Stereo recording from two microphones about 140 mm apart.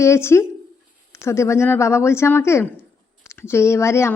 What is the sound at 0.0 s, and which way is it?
A woman's voice, 20° left (ahead or behind).